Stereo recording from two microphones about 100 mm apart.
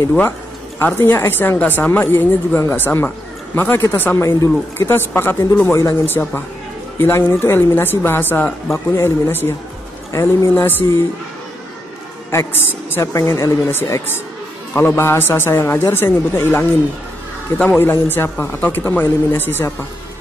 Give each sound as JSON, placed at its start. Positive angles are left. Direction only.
{"t": 0.7, "sound": "a woman's voice", "side_deg": 20}
{"t": 12.3, "sound": "a woman's voice", "side_deg": 25}